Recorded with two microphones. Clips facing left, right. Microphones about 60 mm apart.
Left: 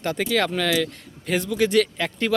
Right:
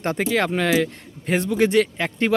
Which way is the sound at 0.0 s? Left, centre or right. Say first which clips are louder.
Right 1 dB; right.